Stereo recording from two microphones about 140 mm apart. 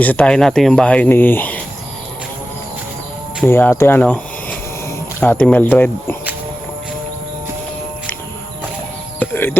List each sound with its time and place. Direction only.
0.0 s speech: 10° left (ahead or behind)
3.4 s speech: 15° left (ahead or behind)
5.2 s speech: 10° left (ahead or behind)
9.1 s music: 15° left (ahead or behind)